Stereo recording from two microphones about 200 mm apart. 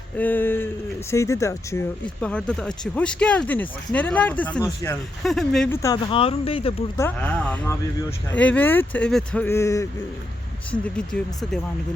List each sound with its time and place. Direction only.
0.2 s speech: 10° left (ahead or behind)
2.2 s speech: 5° left (ahead or behind)
5.7 s speech: 15° left (ahead or behind)
6.1 s speech: 25° left (ahead or behind)
6.9 s speech: 10° left (ahead or behind)